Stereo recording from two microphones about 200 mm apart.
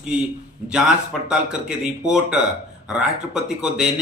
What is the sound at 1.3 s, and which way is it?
A man's voice, 5° right (ahead or behind).